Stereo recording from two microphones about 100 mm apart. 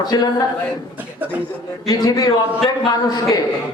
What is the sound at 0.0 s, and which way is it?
Speech, 40° left (ahead or behind).